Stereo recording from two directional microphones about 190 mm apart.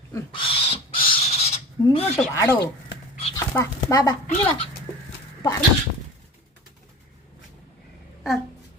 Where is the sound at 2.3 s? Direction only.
15° left (ahead or behind).